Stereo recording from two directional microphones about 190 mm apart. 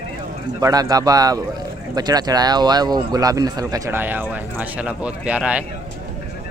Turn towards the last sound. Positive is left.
turn(degrees=-5)  # may be behind; listen again after turning